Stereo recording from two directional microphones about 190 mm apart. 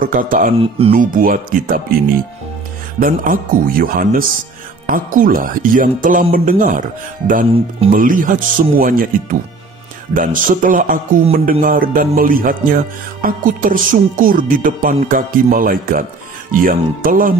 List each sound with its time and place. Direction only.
0.0 s music: 45° right (ahead or behind)
0.6 s speech: 30° right (ahead or behind)
0.9 s music: 45° right (ahead or behind)
3.0 s music: 45° right (ahead or behind)
7.9 s music: 45° right (ahead or behind)